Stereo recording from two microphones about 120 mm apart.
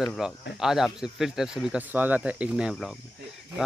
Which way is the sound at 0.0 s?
Centre (ahead or behind).